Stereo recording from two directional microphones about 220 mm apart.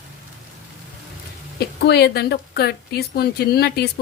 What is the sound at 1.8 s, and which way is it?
Speech, 50° left (ahead or behind).